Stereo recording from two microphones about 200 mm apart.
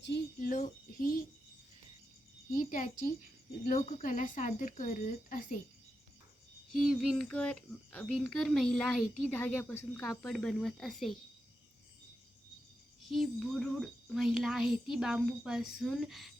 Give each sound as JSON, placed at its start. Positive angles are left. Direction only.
{"t": 0.0, "sound": "child singing", "side_deg": 50}
{"t": 2.6, "sound": "a sound", "side_deg": 40}
{"t": 3.7, "sound": "speech", "side_deg": 35}
{"t": 7.0, "sound": "a child's voice", "side_deg": 0}
{"t": 13.1, "sound": "a child's voice", "side_deg": 0}